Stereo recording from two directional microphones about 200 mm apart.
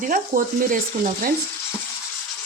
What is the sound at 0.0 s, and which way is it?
Speech, 40° right (ahead or behind).